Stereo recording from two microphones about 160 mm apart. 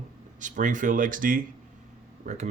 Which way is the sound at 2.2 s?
45° right (ahead or behind).